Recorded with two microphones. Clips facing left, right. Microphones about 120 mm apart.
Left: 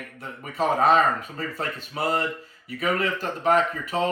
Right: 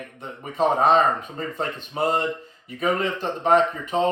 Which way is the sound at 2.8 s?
20° right (ahead or behind).